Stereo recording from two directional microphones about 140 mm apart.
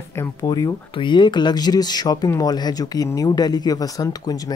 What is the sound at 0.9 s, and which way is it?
Speech, 35° left (ahead or behind).